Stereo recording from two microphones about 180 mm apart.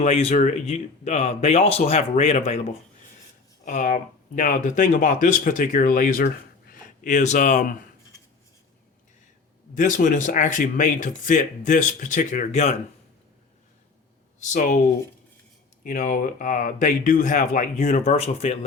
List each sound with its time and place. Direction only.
0.0 s speech: 35° left (ahead or behind)
9.7 s speech: 45° left (ahead or behind)
14.3 s speech: 45° left (ahead or behind)